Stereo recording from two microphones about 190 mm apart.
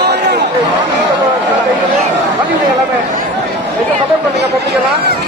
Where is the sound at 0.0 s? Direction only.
60° right (ahead or behind).